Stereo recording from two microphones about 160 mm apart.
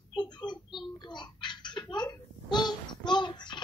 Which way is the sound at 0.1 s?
30° left (ahead or behind).